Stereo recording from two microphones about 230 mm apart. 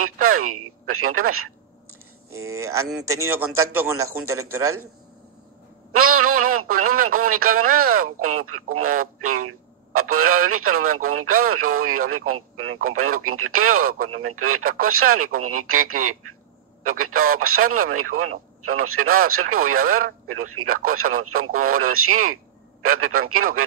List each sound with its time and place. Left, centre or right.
0.0 s speech: right
2.3 s a man's voice: centre
5.9 s speech: right
7.4 s speech: right
8.0 s speech: right